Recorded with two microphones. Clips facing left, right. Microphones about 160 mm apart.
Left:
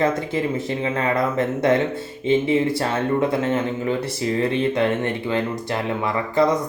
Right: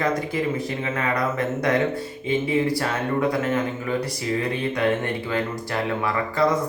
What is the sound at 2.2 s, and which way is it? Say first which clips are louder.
A man's voice: left 4 dB; 25° left (ahead or behind).